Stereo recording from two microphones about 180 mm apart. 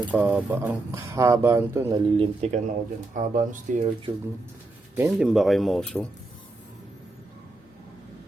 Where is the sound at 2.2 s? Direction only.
35° right (ahead or behind).